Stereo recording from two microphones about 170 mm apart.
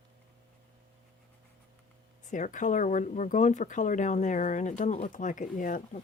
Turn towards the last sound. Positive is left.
turn(degrees=50)  # may be behind; listen again after turning